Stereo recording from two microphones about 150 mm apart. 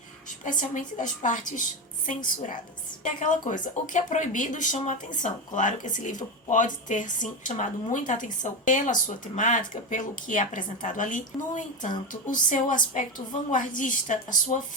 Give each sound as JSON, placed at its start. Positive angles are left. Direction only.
{"t": 0.4, "sound": "speech", "side_deg": 60}